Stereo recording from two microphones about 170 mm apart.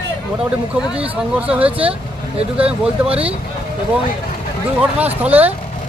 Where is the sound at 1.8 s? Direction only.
35° right (ahead or behind).